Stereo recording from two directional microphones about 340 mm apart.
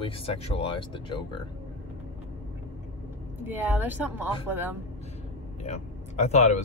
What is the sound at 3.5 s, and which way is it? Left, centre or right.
Speech, centre.